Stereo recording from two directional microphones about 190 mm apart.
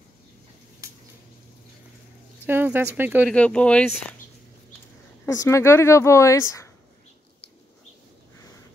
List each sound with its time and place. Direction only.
0.8 s a sound: 15° right (ahead or behind)
2.4 s speech: 10° right (ahead or behind)
3.3 s speech: 5° left (ahead or behind)
5.2 s speech: 15° left (ahead or behind)